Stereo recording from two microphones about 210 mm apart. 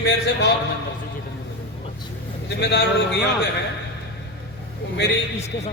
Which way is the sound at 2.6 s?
55° left (ahead or behind).